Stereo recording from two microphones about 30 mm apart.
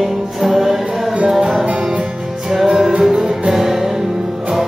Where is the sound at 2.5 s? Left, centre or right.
Centre.